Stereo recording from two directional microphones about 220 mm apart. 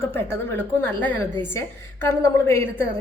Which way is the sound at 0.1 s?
10° left (ahead or behind).